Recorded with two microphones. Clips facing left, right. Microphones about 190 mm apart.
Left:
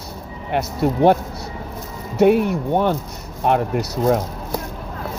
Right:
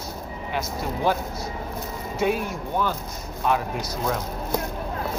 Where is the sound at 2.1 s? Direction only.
65° left (ahead or behind).